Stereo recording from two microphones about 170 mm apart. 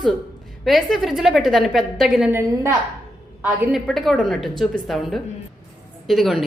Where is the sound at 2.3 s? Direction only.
15° right (ahead or behind).